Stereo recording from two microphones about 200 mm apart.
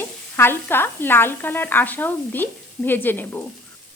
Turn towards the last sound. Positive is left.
turn(degrees=10)  # may be behind; listen again after turning